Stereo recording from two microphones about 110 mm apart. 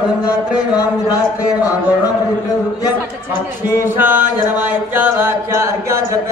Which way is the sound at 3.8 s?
20° right (ahead or behind).